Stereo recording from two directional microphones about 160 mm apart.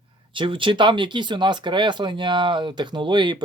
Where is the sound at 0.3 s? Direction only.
30° right (ahead or behind).